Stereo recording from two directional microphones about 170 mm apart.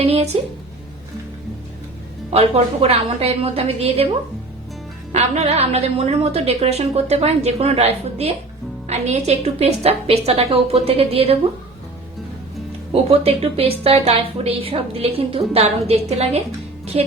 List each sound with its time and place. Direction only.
0.0 s a sound: 35° right (ahead or behind)
2.3 s a woman's voice: 35° right (ahead or behind)
5.1 s a woman's voice: 40° right (ahead or behind)
12.9 s a woman's voice: 35° right (ahead or behind)